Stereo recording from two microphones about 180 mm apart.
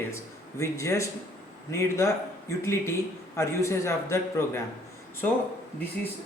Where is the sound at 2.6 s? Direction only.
15° left (ahead or behind).